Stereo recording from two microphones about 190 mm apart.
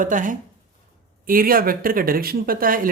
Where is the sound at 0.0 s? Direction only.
45° right (ahead or behind).